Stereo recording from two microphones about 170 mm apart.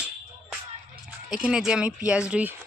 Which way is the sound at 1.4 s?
5° right (ahead or behind).